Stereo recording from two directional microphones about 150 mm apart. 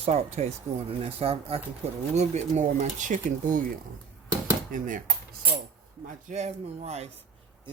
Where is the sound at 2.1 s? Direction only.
50° right (ahead or behind).